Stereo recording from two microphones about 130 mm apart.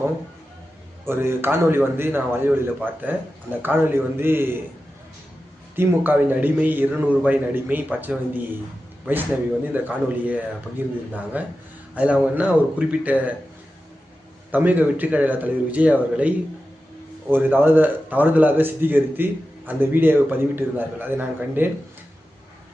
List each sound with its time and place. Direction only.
1.0 s a man's voice: 20° right (ahead or behind)
5.7 s a man's voice: 15° right (ahead or behind)
9.7 s a man's voice: 15° right (ahead or behind)
14.5 s a man's voice: 15° right (ahead or behind)